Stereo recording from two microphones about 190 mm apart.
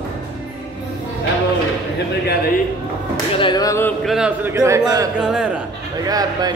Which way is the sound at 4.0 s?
5° right (ahead or behind).